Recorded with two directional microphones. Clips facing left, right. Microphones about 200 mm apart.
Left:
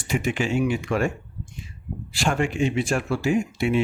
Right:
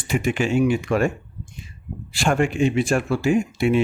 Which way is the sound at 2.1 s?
55° right (ahead or behind).